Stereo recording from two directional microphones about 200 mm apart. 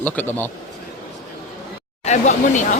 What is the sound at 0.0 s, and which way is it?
Speech, 10° left (ahead or behind).